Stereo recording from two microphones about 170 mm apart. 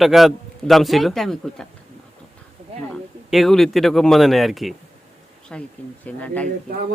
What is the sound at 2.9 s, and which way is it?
A man's voice, centre (ahead or behind).